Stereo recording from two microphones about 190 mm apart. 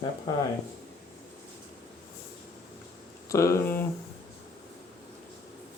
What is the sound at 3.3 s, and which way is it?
Speech, 15° left (ahead or behind).